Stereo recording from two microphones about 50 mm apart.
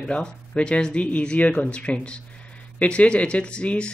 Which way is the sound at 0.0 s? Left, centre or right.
Left.